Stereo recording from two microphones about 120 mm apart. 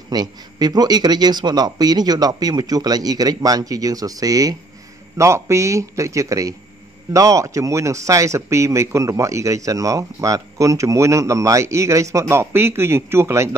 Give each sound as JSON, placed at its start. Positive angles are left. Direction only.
{"t": 0.1, "sound": "speech", "side_deg": -35}